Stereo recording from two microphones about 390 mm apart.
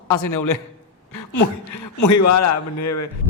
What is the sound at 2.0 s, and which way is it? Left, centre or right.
A man's voice, left.